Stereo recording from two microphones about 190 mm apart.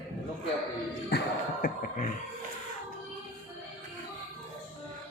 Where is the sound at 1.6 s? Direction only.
45° left (ahead or behind).